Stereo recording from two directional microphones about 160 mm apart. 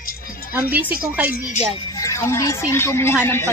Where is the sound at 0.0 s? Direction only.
65° left (ahead or behind).